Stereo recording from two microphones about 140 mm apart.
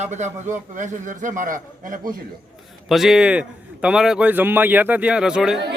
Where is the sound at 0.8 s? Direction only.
65° right (ahead or behind).